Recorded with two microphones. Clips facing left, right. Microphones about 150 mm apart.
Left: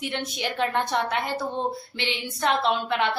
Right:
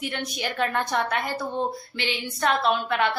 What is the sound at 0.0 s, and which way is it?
A woman's voice, 25° left (ahead or behind).